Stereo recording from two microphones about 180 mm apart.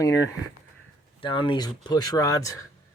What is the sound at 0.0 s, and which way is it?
Speech, 20° left (ahead or behind).